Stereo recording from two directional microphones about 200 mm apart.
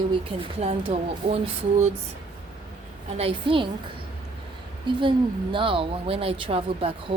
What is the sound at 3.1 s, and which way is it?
Speech, 25° right (ahead or behind).